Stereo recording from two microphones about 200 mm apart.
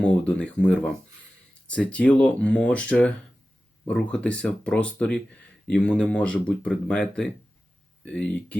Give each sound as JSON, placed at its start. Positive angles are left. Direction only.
{"t": 0.0, "sound": "speech", "side_deg": 5}